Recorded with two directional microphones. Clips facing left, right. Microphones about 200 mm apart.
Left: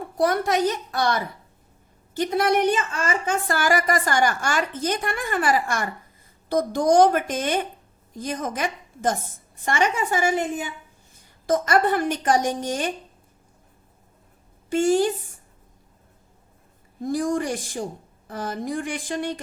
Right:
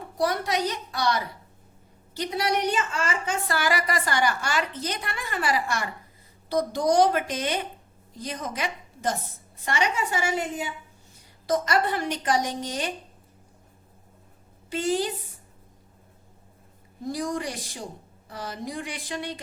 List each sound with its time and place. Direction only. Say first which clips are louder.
0.2 s a woman's voice: left 5 dB; 50° left (ahead or behind)
11.4 s a woman's voice: left 4 dB; 50° left (ahead or behind)
14.7 s a woman's voice: left 7 dB; 50° left (ahead or behind)
17.1 s a woman's voice: left 6 dB; 50° left (ahead or behind)